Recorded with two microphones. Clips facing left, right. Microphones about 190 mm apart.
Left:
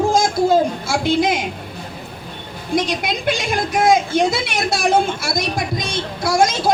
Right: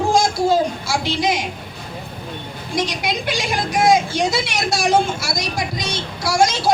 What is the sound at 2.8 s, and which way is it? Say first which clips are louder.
A woman's voice: even; 55° left (ahead or behind).